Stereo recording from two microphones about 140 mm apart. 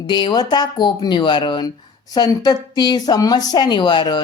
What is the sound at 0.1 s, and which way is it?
A woman's voice, 30° left (ahead or behind).